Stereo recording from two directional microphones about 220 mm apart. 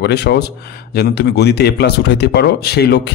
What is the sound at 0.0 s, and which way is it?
A man's voice, 50° left (ahead or behind).